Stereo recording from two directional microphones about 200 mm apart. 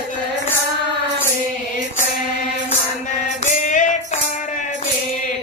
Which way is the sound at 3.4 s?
40° left (ahead or behind).